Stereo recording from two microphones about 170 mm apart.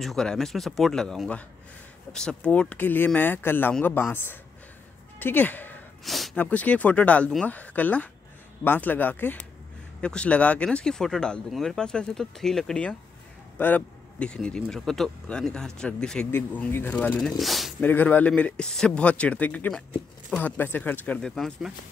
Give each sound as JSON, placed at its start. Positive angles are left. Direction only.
{"t": 0.0, "sound": "speech", "side_deg": 0}
{"t": 6.0, "sound": "a sound", "side_deg": 0}
{"t": 6.4, "sound": "speech", "side_deg": 10}
{"t": 17.7, "sound": "speech", "side_deg": 10}